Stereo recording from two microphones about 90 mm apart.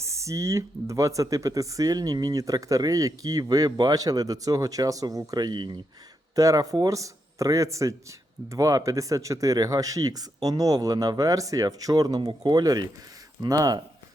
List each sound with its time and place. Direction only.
0.0 s speech: 35° right (ahead or behind); by 5.8 s 55° right (ahead or behind)
6.3 s speech: 40° right (ahead or behind)